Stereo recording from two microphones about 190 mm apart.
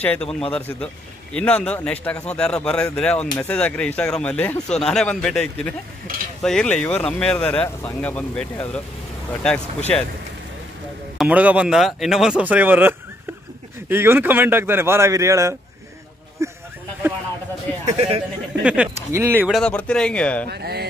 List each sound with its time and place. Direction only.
0.0 s speech: 5° left (ahead or behind)
11.1 s speech: 5° right (ahead or behind)
17.8 s a man's voice: 30° right (ahead or behind)
18.6 s speech: 5° right (ahead or behind)
19.6 s speech: 5° left (ahead or behind)
20.4 s speech: 60° right (ahead or behind)